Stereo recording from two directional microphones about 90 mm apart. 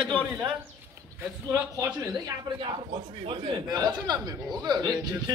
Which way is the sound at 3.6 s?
45° right (ahead or behind).